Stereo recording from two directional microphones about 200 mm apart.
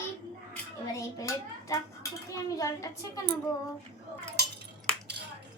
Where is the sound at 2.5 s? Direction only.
15° left (ahead or behind).